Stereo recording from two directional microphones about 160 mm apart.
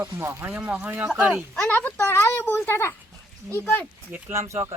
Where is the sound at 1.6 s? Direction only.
10° left (ahead or behind).